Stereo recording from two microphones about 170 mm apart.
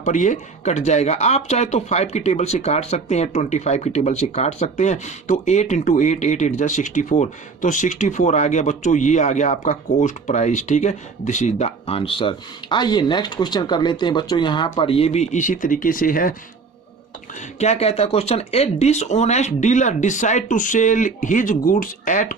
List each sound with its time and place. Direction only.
0.0 s speech: 45° left (ahead or behind)
17.6 s speech: 40° left (ahead or behind)